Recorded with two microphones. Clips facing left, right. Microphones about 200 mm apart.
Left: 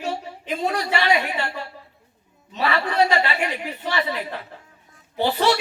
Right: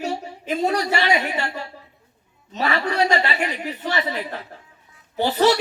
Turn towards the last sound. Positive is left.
turn(degrees=-45)  # may be behind; listen again after turning